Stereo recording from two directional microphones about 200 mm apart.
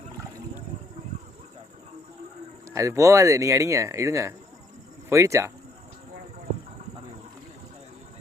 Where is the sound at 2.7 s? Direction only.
15° right (ahead or behind).